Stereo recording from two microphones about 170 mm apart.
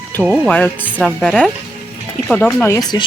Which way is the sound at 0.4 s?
10° left (ahead or behind).